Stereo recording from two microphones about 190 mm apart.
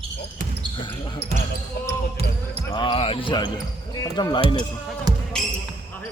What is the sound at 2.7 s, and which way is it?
Speech, 25° left (ahead or behind).